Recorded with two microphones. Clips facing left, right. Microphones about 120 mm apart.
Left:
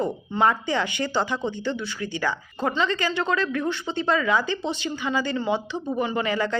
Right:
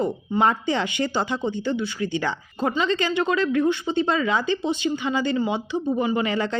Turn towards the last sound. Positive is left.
turn(degrees=-20)  # may be behind; listen again after turning